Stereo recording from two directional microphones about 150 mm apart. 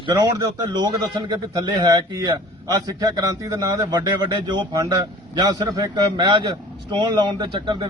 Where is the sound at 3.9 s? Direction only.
25° right (ahead or behind).